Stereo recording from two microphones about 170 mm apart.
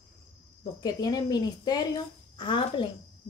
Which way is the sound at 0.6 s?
25° left (ahead or behind).